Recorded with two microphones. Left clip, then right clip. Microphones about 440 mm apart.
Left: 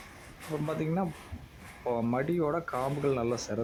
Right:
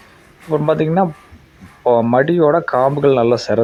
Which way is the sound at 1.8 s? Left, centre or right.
Left.